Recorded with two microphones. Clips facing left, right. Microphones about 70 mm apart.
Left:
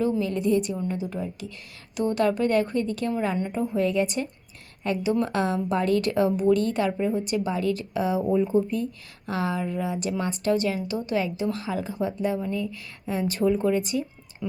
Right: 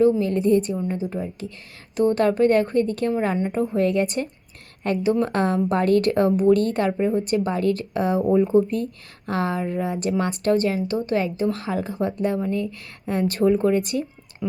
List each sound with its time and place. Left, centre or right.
0.0 s a woman's voice: right